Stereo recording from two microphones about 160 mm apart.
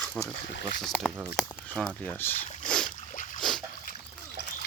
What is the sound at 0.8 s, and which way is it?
Speech, centre (ahead or behind).